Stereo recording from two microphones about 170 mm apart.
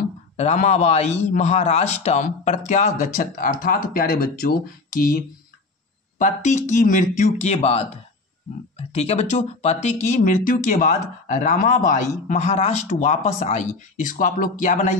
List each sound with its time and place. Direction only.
0.4 s a man's voice: 40° left (ahead or behind)
10.0 s speech: 50° left (ahead or behind)